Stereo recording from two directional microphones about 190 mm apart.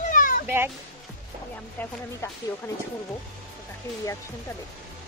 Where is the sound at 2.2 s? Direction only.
15° left (ahead or behind).